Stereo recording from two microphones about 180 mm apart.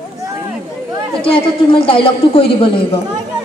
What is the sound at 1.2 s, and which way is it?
A woman's voice, 30° left (ahead or behind).